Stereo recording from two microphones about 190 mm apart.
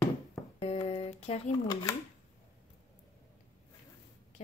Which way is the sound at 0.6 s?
35° left (ahead or behind).